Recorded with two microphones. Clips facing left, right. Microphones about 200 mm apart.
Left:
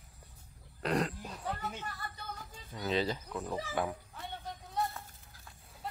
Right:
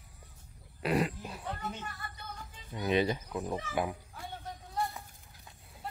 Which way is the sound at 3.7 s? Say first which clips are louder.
Right 1 dB; 10° right (ahead or behind).